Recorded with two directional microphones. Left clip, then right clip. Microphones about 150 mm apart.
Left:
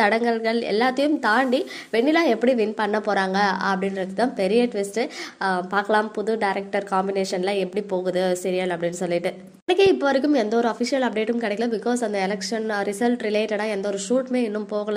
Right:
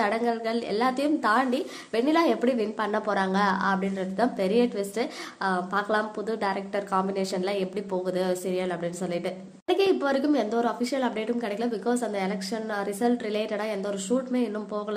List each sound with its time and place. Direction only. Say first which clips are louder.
0.0 s a woman's voice: left 6 dB; 20° left (ahead or behind)